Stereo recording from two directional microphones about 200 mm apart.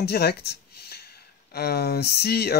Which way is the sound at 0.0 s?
50° left (ahead or behind).